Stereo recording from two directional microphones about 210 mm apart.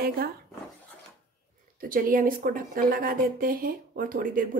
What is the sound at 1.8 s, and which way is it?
Speech, 40° right (ahead or behind).